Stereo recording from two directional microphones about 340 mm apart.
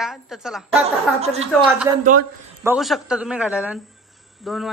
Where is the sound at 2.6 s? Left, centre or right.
Centre.